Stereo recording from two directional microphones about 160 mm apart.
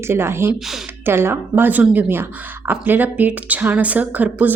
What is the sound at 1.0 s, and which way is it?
Speech, 15° right (ahead or behind).